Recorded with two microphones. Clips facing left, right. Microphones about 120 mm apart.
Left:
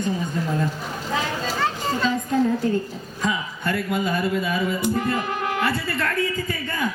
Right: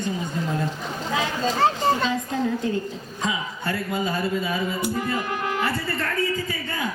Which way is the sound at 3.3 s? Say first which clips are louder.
Left 3 dB; 60° left (ahead or behind).